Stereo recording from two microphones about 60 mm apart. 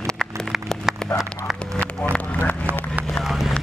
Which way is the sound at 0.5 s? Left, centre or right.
Centre.